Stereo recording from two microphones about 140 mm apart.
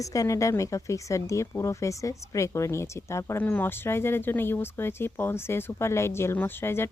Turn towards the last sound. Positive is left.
turn(degrees=15)  # may be behind; listen again after turning